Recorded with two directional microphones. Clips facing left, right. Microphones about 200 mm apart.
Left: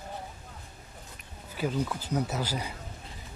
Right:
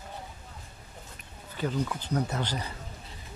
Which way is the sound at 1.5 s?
10° left (ahead or behind).